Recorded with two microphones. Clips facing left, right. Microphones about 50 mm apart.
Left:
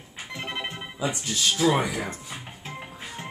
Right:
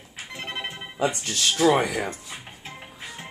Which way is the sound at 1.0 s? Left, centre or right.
Right.